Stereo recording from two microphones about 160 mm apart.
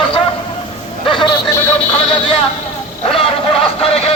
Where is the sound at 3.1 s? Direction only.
35° left (ahead or behind).